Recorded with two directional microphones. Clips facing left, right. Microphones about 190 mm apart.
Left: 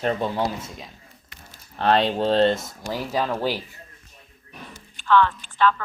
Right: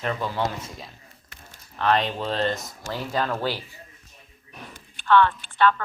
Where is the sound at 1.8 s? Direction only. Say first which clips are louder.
Left 3 dB; 30° left (ahead or behind).